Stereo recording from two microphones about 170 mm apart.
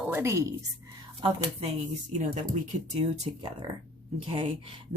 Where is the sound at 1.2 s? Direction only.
30° right (ahead or behind).